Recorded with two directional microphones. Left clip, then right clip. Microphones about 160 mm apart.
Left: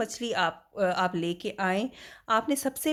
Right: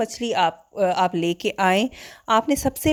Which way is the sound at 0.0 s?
30° right (ahead or behind).